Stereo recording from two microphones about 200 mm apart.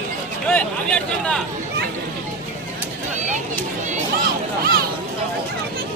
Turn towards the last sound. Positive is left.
turn(degrees=-45)  # may be behind; listen again after turning